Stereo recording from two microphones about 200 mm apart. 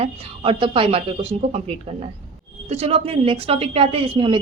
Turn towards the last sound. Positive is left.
turn(degrees=-25)  # may be behind; listen again after turning